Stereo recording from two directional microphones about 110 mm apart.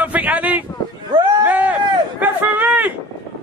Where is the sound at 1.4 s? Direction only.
15° right (ahead or behind).